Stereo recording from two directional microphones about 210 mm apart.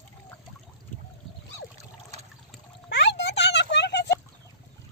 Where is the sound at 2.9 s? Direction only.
55° left (ahead or behind).